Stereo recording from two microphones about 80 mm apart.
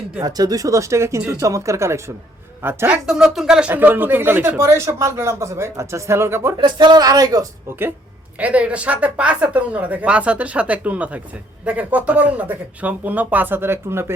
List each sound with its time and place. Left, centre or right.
0.2 s speech: right
3.1 s speech: centre
3.7 s speech: right
4.6 s speech: right
6.6 s speech: right
8.4 s speech: centre